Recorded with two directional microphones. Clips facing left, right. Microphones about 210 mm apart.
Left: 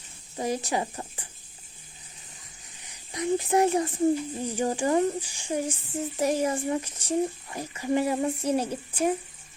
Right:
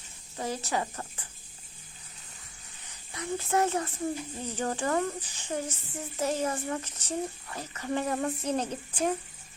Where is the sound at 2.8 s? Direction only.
15° left (ahead or behind).